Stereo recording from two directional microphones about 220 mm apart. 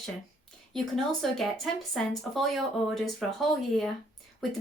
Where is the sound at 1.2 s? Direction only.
Centre (ahead or behind).